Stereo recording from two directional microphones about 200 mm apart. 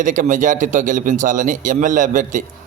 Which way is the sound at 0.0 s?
40° right (ahead or behind).